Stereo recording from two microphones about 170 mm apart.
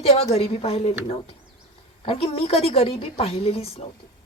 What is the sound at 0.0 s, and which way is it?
A woman's voice, 35° left (ahead or behind).